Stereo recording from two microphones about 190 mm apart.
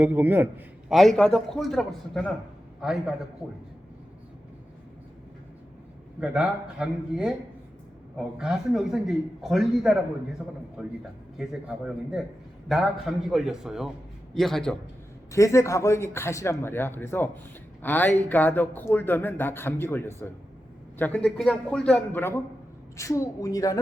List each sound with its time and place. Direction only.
0.0 s a man's voice: 10° right (ahead or behind)
0.9 s a man's voice: centre (ahead or behind)
6.1 s a man's voice: 5° right (ahead or behind)
8.4 s a man's voice: centre (ahead or behind)
12.6 s a man's voice: centre (ahead or behind)
15.3 s speech: 15° left (ahead or behind)